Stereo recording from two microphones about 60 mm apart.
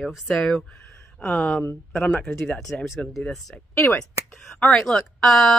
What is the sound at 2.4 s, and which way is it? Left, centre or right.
Speech, centre.